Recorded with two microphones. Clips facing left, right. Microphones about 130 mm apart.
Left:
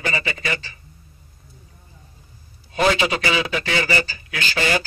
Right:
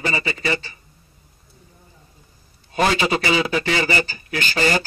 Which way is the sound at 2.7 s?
35° right (ahead or behind).